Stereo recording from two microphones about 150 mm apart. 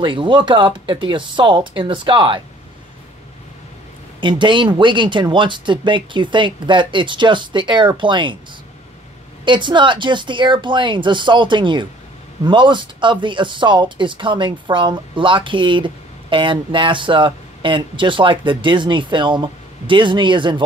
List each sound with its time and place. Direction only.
0.0 s speech: 30° right (ahead or behind)
4.2 s speech: 30° right (ahead or behind)
9.4 s speech: 30° right (ahead or behind)